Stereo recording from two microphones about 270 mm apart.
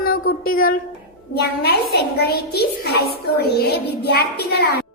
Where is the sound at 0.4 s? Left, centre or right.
Left.